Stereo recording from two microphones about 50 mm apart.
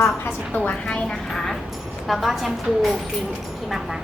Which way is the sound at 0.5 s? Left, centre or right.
Left.